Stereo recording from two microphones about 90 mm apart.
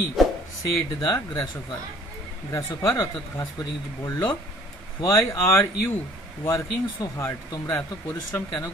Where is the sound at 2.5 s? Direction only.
30° left (ahead or behind).